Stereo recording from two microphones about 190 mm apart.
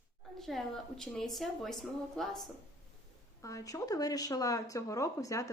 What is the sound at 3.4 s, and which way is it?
Speech, 15° left (ahead or behind).